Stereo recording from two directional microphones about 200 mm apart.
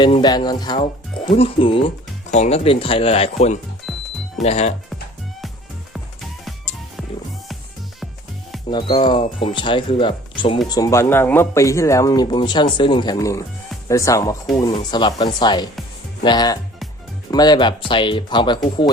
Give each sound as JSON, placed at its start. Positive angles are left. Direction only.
{"t": 0.0, "sound": "speech", "side_deg": 20}
{"t": 3.9, "sound": "music", "side_deg": 0}
{"t": 4.4, "sound": "speech", "side_deg": 35}
{"t": 8.7, "sound": "speech", "side_deg": 25}